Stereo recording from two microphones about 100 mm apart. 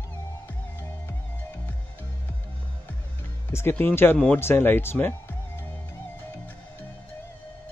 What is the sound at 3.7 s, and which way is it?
Speech, 20° left (ahead or behind).